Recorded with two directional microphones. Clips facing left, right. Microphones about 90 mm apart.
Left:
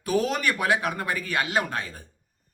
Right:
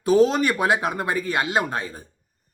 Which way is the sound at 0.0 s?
25° right (ahead or behind).